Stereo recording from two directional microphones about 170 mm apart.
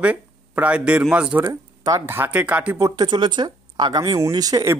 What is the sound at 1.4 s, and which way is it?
A man's voice, 20° right (ahead or behind).